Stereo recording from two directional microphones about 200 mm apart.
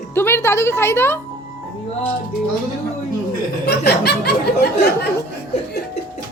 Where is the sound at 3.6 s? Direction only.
55° left (ahead or behind).